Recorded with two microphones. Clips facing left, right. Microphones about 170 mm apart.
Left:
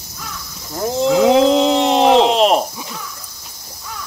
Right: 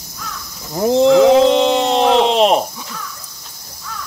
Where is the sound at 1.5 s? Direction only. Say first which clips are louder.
Even; 5° left (ahead or behind).